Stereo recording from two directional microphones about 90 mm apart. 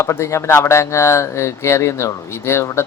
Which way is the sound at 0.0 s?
35° left (ahead or behind).